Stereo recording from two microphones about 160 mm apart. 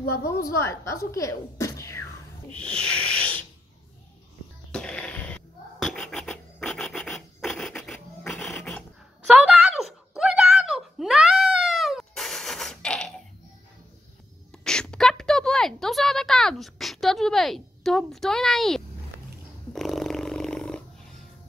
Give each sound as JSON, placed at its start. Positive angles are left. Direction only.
{"t": 0.1, "sound": "speech", "side_deg": 15}
{"t": 2.5, "sound": "rub", "side_deg": 5}
{"t": 4.7, "sound": "music", "side_deg": 5}
{"t": 5.9, "sound": "rub", "side_deg": 5}
{"t": 9.3, "sound": "a sound", "side_deg": -5}
{"t": 14.6, "sound": "a sound", "side_deg": 5}
{"t": 19.7, "sound": "snoring", "side_deg": 0}